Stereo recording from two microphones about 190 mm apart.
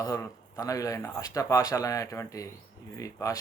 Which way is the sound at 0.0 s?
15° left (ahead or behind).